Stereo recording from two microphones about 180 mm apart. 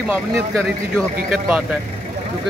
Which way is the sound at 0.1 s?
5° right (ahead or behind).